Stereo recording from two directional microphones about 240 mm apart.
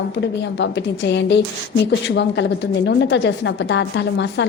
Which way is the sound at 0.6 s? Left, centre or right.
Left.